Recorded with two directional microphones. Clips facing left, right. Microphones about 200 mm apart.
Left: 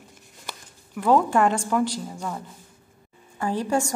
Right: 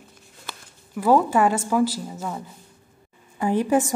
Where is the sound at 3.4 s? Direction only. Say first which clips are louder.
Right 4 dB; 15° right (ahead or behind).